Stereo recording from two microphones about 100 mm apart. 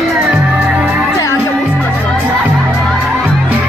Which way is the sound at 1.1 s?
25° left (ahead or behind).